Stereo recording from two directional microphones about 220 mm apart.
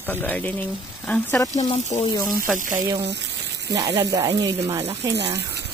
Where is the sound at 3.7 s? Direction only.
15° right (ahead or behind).